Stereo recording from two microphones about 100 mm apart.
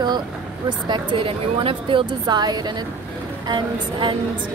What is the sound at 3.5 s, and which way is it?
Speech, 55° right (ahead or behind).